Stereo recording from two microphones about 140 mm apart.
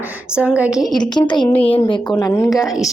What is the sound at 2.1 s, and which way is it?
Speech, 25° left (ahead or behind).